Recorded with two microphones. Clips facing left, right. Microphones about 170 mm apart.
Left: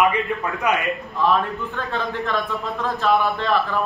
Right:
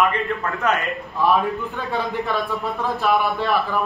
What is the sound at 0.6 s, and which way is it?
Speech, 10° left (ahead or behind).